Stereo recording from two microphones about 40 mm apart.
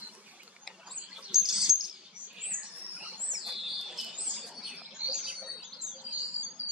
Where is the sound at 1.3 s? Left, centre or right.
Centre.